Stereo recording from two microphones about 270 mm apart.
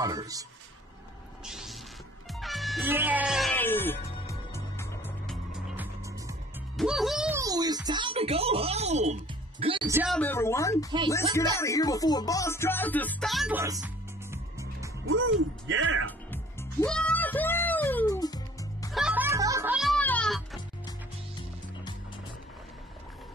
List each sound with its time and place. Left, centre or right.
0.0 s a man's voice: centre
1.4 s music: centre
6.8 s speech: centre
7.3 s speech: centre
10.1 s speech: centre
11.5 s music: centre
15.0 s speech: right
16.8 s music: centre
18.9 s music: centre
20.0 s music: centre